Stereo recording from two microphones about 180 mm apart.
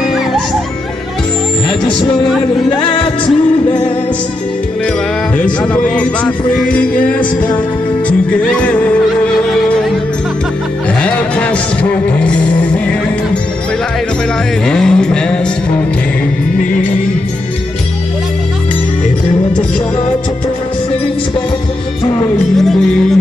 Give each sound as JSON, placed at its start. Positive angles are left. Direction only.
{"t": 2.8, "sound": "music", "side_deg": 30}
{"t": 5.4, "sound": "speech", "side_deg": 5}
{"t": 8.3, "sound": "music", "side_deg": 5}
{"t": 11.0, "sound": "music", "side_deg": 5}
{"t": 14.7, "sound": "music", "side_deg": 5}
{"t": 22.6, "sound": "music", "side_deg": 0}